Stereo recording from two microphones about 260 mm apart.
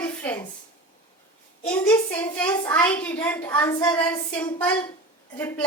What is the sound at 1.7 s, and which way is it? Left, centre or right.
A child's voice, centre.